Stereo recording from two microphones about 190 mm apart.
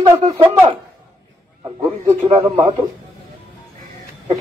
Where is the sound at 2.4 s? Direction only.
15° right (ahead or behind).